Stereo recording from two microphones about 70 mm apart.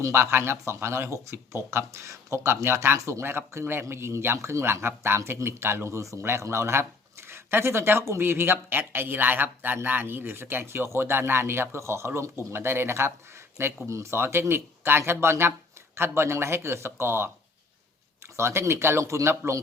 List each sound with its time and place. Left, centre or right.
0.0 s speech: right
18.3 s speech: right